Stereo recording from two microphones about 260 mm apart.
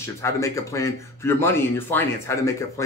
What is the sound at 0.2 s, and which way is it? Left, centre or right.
Speech, centre.